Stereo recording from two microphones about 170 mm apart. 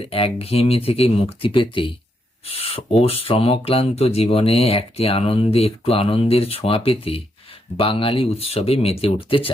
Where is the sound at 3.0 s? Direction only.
35° left (ahead or behind).